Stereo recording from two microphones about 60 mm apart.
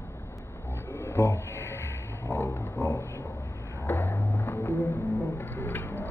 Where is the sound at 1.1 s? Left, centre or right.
Left.